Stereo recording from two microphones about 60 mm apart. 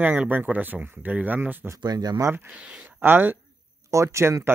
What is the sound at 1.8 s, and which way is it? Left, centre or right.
Speech, right.